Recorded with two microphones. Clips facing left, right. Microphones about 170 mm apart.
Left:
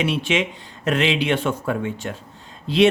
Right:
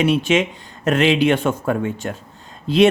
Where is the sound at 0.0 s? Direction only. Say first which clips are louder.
Right 5 dB; 45° right (ahead or behind).